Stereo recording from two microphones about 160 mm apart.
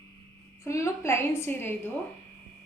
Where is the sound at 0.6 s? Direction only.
20° left (ahead or behind).